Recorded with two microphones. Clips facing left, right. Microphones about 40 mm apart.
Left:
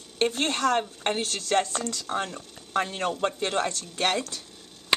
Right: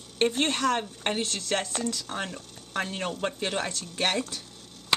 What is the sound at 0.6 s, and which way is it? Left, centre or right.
Speech, centre.